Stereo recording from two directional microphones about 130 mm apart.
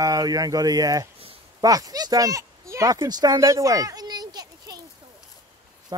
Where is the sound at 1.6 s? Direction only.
30° right (ahead or behind).